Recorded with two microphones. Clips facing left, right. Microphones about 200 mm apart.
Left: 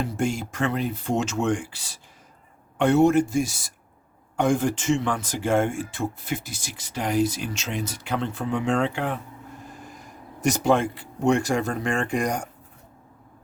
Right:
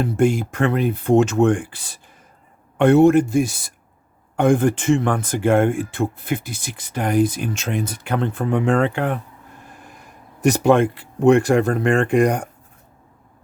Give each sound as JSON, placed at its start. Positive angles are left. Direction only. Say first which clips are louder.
{"t": 0.0, "sound": "speech", "louder": "right 8 dB", "side_deg": -55}
{"t": 10.4, "sound": "speech", "louder": "right 6 dB", "side_deg": -60}